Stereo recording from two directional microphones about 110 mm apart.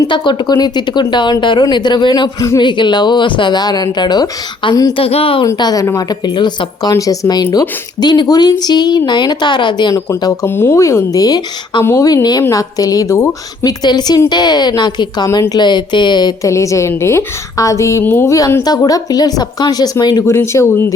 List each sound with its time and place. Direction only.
0.1 s a woman's voice: 45° left (ahead or behind)
4.9 s a woman's voice: 60° left (ahead or behind)
5.5 s a woman's voice: 40° left (ahead or behind)
6.9 s a woman's voice: 30° left (ahead or behind)
9.9 s speech: 30° left (ahead or behind)
11.8 s a woman's voice: 25° left (ahead or behind)
13.7 s a woman's voice: 40° left (ahead or behind)
16.5 s speech: 25° left (ahead or behind)
18.6 s a woman's voice: 35° left (ahead or behind)
20.2 s speech: 25° left (ahead or behind)